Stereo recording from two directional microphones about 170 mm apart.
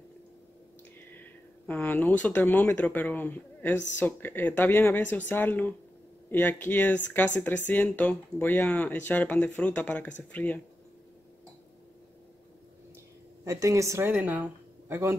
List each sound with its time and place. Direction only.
1.7 s speech: 10° left (ahead or behind)
13.4 s a woman's voice: 15° right (ahead or behind)